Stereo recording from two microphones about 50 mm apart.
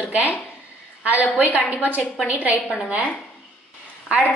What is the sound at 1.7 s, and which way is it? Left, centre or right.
Speech, right.